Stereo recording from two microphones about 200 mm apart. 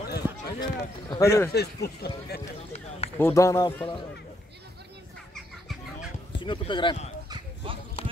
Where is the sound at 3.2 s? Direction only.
15° left (ahead or behind).